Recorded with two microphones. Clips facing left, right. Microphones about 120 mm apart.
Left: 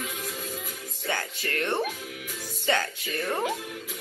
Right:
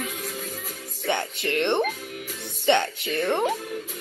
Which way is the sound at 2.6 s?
25° right (ahead or behind).